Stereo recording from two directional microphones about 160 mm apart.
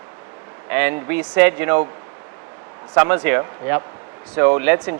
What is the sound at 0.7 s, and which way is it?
Speech, 10° right (ahead or behind).